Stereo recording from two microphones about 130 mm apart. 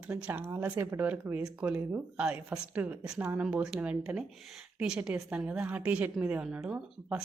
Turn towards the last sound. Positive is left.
turn(degrees=-10)  # may be behind; listen again after turning